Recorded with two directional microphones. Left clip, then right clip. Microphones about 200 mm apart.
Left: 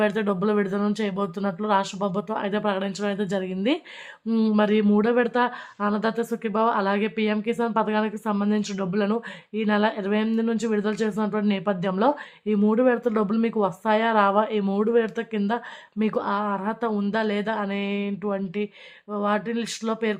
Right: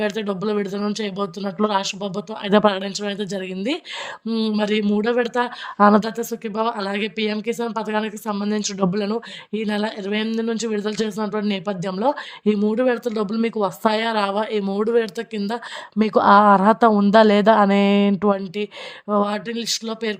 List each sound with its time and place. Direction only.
0.0 s speech: 45° right (ahead or behind)
4.3 s speech: 35° right (ahead or behind)
4.5 s speech: 50° right (ahead or behind)
11.8 s speech: centre (ahead or behind)
12.0 s speech: 50° right (ahead or behind)
14.6 s speech: 35° right (ahead or behind)
16.9 s speech: 35° right (ahead or behind)
17.2 s speech: 45° right (ahead or behind)